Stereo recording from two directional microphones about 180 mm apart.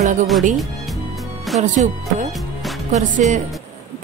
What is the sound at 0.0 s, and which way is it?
Speech, 45° right (ahead or behind).